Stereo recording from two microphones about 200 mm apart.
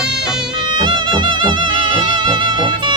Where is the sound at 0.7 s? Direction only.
20° right (ahead or behind).